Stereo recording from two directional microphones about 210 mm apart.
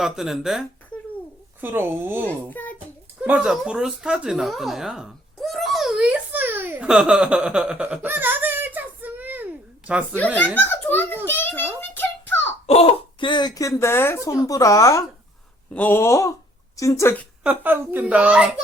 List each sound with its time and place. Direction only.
0.0 s speech: centre (ahead or behind)
1.6 s a child's voice: 10° right (ahead or behind)
2.2 s a child's voice: 10° left (ahead or behind)
3.2 s a sound: 5° right (ahead or behind)
10.2 s a sound: 5° left (ahead or behind)
12.6 s a woman's voice: 30° left (ahead or behind); by 17.2 s 10° left (ahead or behind)
17.4 s a child's voice: 10° right (ahead or behind)